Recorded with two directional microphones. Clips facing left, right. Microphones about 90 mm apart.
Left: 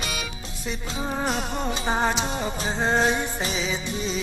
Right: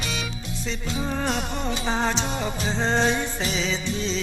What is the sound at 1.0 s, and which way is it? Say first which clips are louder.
Music: even; 15° left (ahead or behind).